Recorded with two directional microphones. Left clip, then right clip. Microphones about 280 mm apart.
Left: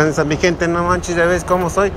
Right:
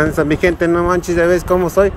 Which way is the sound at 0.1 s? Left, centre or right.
Right.